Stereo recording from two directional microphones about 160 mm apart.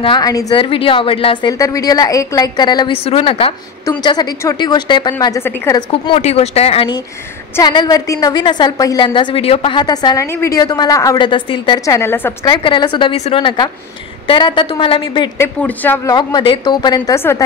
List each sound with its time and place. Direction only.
0.0 s a woman's voice: 25° left (ahead or behind)
1.6 s a woman's voice: 20° left (ahead or behind)
6.2 s a woman's voice: 40° left (ahead or behind); by 12.4 s 15° left (ahead or behind)
12.4 s a woman's voice: 30° left (ahead or behind)
15.3 s speech: 15° left (ahead or behind)
16.1 s a woman's voice: 25° left (ahead or behind)